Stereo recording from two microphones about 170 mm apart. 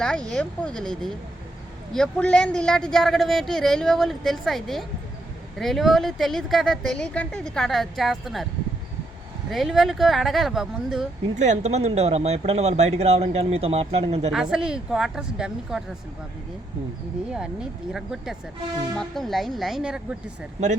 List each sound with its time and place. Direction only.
0.0 s a woman's voice: 5° left (ahead or behind)
9.5 s a woman's voice: centre (ahead or behind)
11.3 s speech: 45° right (ahead or behind)
14.5 s a woman's voice: 5° right (ahead or behind)
17.3 s a woman's voice: 5° right (ahead or behind)